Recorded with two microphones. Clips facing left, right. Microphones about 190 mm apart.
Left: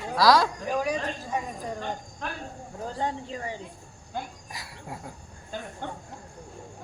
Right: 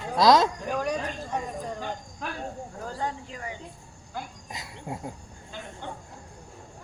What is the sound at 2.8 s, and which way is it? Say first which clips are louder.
Speech: left 3 dB; 25° left (ahead or behind).